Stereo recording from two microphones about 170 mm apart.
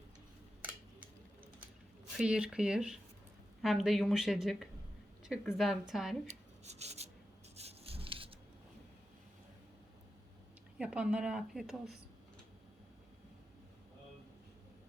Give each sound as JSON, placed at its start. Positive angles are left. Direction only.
{"t": 0.6, "sound": "scissors", "side_deg": -10}
{"t": 2.1, "sound": "a woman's voice", "side_deg": -5}
{"t": 6.2, "sound": "rub", "side_deg": -40}
{"t": 10.8, "sound": "a woman's voice", "side_deg": -5}